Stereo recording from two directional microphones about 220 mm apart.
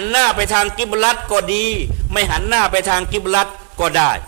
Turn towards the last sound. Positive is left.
turn(degrees=-15)  # may be behind; listen again after turning